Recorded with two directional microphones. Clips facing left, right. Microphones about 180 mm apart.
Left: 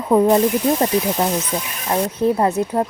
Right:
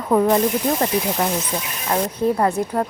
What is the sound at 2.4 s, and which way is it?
Speech, 20° left (ahead or behind).